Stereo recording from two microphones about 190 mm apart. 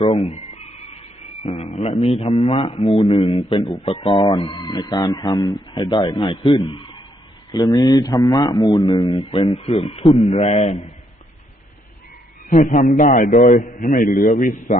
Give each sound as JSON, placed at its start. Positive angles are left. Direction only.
{"t": 0.0, "sound": "speech", "side_deg": 30}
{"t": 12.5, "sound": "a man's voice", "side_deg": 45}